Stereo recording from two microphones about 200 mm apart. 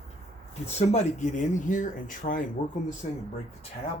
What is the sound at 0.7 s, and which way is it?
Speech, 35° left (ahead or behind).